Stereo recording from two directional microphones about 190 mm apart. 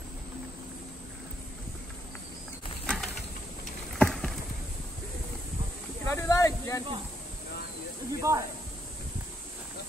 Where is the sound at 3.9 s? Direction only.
5° left (ahead or behind).